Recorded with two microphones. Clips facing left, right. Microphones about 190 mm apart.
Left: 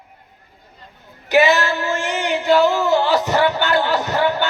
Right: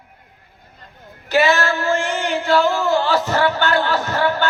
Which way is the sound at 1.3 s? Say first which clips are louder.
Left 2 dB; 20° left (ahead or behind).